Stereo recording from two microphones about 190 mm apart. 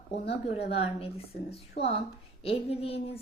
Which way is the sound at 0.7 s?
30° left (ahead or behind).